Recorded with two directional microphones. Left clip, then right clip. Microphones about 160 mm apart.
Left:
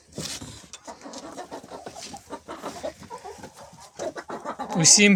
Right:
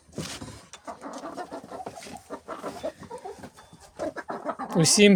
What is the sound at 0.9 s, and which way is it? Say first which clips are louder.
Bird: right 2 dB; centre (ahead or behind).